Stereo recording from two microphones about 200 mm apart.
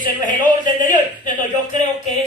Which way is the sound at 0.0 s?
40° left (ahead or behind).